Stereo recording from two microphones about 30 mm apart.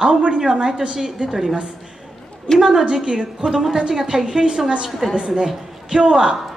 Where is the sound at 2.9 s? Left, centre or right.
Right.